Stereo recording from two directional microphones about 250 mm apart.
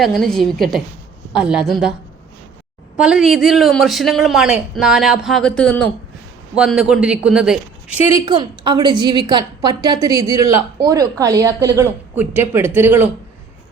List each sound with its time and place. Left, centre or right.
0.0 s a man's voice: centre
3.0 s a man's voice: centre
8.2 s a woman's voice: centre